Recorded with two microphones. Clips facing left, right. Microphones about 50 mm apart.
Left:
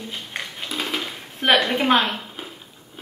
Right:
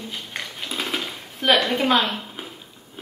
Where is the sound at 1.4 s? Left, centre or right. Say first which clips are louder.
Left 1 dB; left.